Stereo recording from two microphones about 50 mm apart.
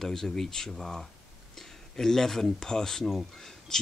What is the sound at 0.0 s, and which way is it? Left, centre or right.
Speech, centre.